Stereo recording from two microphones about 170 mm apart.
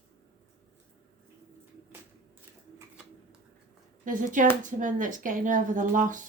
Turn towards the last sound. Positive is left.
turn(degrees=-50)  # may be behind; listen again after turning